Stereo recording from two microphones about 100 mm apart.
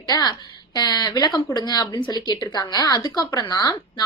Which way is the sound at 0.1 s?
45° left (ahead or behind).